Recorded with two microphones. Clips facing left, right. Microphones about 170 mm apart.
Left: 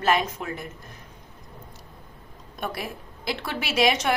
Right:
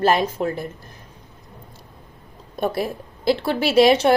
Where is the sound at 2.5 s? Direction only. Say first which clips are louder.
Right 9 dB; 30° right (ahead or behind).